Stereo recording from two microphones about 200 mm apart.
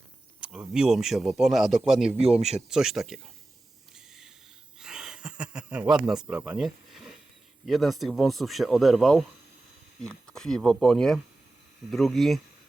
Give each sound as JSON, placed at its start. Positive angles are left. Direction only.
{"t": 0.3, "sound": "speech", "side_deg": -5}
{"t": 2.2, "sound": "speech", "side_deg": -30}
{"t": 2.6, "sound": "speech", "side_deg": 0}
{"t": 4.8, "sound": "speech", "side_deg": -5}